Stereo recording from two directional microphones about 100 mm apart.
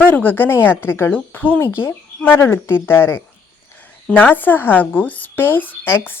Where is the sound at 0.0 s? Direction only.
20° left (ahead or behind).